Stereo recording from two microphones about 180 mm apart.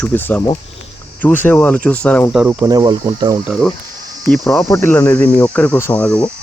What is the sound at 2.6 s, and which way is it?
Speech, 25° right (ahead or behind).